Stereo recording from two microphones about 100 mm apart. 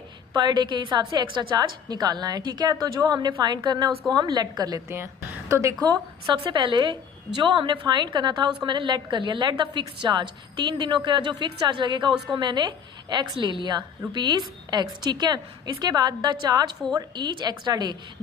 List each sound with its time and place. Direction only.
0.3 s a woman's voice: 45° right (ahead or behind)
4.9 s a woman's voice: 25° right (ahead or behind)
6.2 s a woman's voice: 50° right (ahead or behind)